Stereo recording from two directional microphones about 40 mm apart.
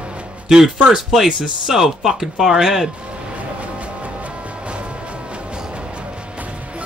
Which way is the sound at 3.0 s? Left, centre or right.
Right.